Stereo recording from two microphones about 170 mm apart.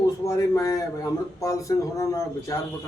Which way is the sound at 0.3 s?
20° left (ahead or behind).